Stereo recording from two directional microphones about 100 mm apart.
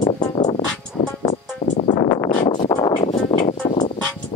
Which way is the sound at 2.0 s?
40° left (ahead or behind).